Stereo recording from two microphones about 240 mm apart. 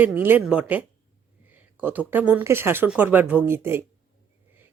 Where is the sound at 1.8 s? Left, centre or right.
Centre.